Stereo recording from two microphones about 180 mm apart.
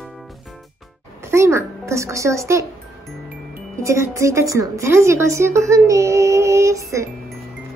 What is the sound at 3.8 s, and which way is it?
A woman's voice, 15° right (ahead or behind).